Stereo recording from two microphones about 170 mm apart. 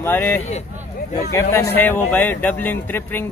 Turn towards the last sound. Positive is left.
turn(degrees=10)  # may be behind; listen again after turning